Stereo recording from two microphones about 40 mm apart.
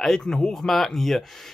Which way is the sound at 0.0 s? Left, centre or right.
Centre.